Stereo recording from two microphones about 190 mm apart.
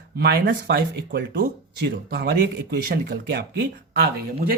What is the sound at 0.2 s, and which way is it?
Speech, 60° right (ahead or behind).